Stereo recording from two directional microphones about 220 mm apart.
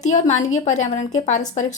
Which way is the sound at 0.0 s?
35° left (ahead or behind).